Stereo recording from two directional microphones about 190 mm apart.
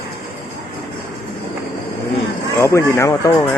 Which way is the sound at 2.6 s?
15° left (ahead or behind).